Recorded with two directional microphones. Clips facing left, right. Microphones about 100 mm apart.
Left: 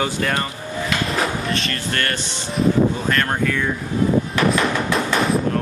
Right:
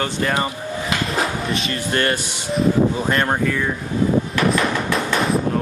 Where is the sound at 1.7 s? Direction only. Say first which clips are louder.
Right 3 dB; 20° right (ahead or behind).